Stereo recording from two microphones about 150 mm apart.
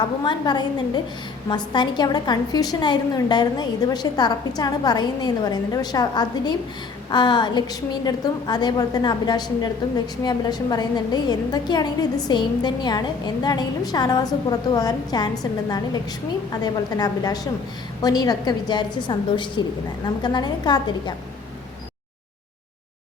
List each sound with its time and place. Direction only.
0.3 s a woman's voice: 30° left (ahead or behind)
16.5 s a woman's voice: 25° left (ahead or behind)